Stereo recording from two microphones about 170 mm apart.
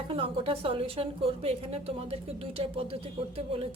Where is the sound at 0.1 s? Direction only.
35° right (ahead or behind).